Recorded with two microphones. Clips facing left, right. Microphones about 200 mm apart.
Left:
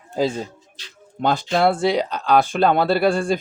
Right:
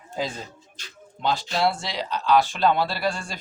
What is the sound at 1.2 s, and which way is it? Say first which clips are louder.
Speech: left 5 dB; 50° left (ahead or behind).